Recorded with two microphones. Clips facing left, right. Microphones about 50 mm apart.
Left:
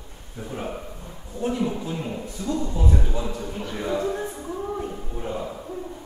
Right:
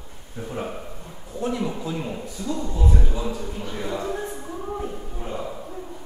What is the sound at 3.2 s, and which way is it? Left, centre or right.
Speech, centre.